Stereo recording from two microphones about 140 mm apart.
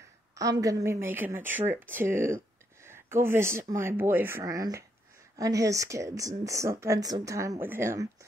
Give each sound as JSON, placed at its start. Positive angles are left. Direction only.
{"t": 0.3, "sound": "speech", "side_deg": -25}